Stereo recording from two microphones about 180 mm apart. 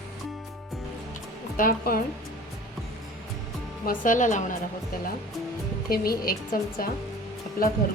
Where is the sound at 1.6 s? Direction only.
55° left (ahead or behind).